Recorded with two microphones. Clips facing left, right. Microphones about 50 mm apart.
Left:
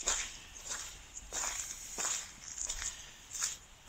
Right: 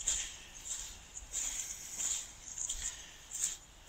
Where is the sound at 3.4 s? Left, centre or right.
Left.